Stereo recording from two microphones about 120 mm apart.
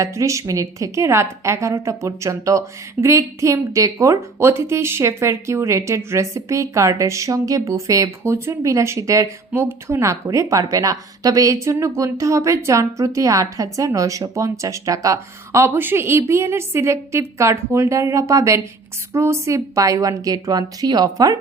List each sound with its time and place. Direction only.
0.0 s a woman's voice: 25° right (ahead or behind)